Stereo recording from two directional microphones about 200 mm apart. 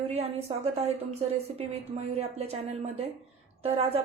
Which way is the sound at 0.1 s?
30° right (ahead or behind).